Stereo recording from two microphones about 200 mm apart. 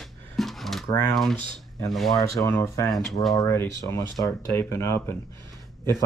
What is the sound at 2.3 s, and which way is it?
Speech, 15° left (ahead or behind).